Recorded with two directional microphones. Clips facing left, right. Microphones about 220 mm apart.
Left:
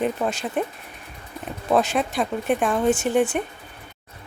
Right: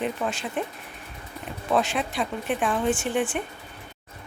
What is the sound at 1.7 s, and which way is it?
Speech, 40° left (ahead or behind).